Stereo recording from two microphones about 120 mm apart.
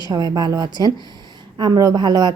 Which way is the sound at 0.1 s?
35° right (ahead or behind).